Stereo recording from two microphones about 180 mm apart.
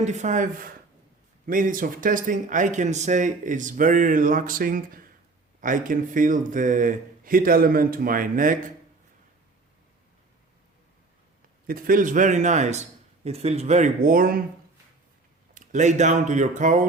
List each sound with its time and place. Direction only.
0.0 s speech: 40° right (ahead or behind)
11.6 s speech: 50° right (ahead or behind)
15.5 s speech: 40° right (ahead or behind)